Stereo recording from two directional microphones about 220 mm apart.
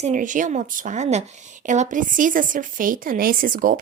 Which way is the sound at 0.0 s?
35° right (ahead or behind).